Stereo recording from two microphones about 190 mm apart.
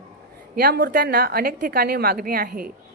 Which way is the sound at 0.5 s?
55° right (ahead or behind).